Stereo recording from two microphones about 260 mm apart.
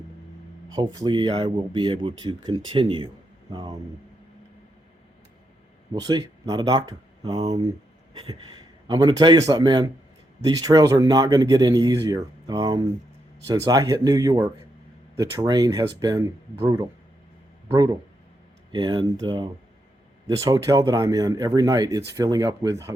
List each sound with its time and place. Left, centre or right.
0.7 s speech: centre
5.9 s speech: centre
8.1 s a sound: centre
8.9 s speech: centre
18.7 s speech: centre